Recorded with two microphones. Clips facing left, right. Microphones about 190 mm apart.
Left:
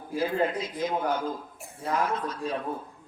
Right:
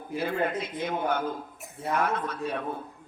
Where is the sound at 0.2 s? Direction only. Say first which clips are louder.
Left 2 dB; 60° right (ahead or behind).